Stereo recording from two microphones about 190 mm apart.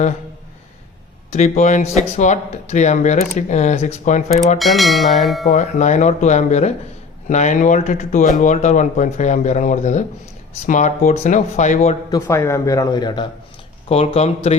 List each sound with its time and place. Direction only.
1.3 s speech: 40° left (ahead or behind)
4.5 s speech: centre (ahead or behind)
5.5 s speech: 40° left (ahead or behind)
12.1 s speech: 15° left (ahead or behind); by 14.5 s 35° left (ahead or behind)